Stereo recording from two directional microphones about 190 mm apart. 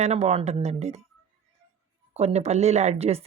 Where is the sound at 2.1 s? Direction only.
35° right (ahead or behind).